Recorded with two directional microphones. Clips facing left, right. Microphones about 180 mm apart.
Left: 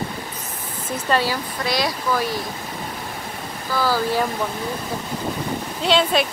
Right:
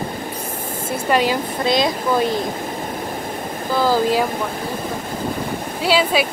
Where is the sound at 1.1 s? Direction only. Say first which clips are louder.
Right 3 dB; 20° right (ahead or behind).